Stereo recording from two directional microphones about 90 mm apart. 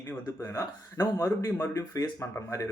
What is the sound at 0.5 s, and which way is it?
Speech, 40° left (ahead or behind).